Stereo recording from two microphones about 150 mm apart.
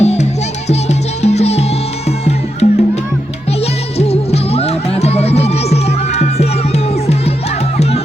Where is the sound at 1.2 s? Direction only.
45° left (ahead or behind).